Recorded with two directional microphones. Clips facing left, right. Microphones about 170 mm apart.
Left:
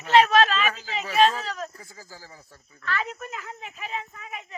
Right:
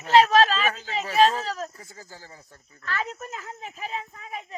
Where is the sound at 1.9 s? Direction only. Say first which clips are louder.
Right 1 dB; 25° right (ahead or behind).